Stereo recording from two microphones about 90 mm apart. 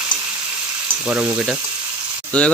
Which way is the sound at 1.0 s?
15° right (ahead or behind).